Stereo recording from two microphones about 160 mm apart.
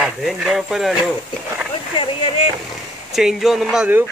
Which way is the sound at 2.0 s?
35° left (ahead or behind).